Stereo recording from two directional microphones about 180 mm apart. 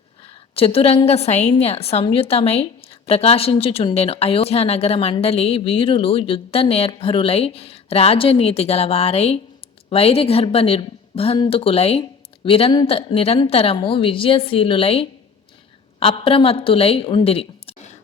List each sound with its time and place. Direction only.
0.5 s a woman's voice: 30° left (ahead or behind)